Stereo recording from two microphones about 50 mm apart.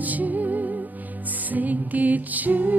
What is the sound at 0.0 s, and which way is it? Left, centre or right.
Music, right.